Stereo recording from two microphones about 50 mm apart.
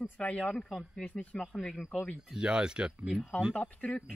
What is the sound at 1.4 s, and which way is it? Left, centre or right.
Speech, centre.